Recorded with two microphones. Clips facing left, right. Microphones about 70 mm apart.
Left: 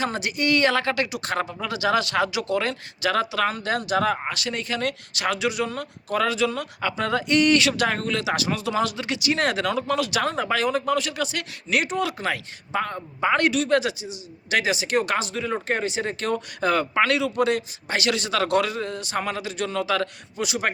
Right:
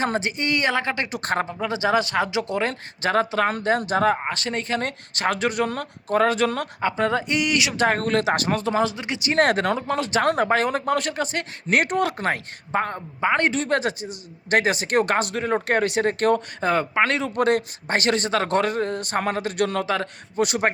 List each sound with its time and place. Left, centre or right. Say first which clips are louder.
0.0 s speech: right 1 dB; right
1.1 s a man's voice: right 2 dB; right
1.6 s a man's voice: right 1 dB; right
6.8 s speech: right 2 dB; right
7.4 s speech: left 4 dB; centre
7.8 s a man's voice: right 4 dB; right
9.4 s speech: right 7 dB; right
9.7 s a man's voice: right 1 dB; right
10.2 s speech: right 4 dB; right
16.6 s a man's voice: even; right
19.8 s a man's voice: left 1 dB; right
20.4 s speech: right 5 dB; right